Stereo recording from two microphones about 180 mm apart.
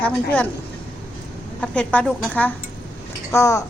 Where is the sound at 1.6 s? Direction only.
5° left (ahead or behind).